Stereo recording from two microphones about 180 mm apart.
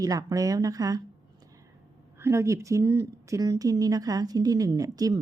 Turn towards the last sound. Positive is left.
turn(degrees=-20)  # may be behind; listen again after turning